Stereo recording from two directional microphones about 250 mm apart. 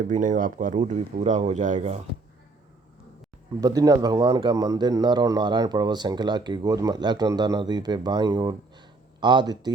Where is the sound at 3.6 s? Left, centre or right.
Centre.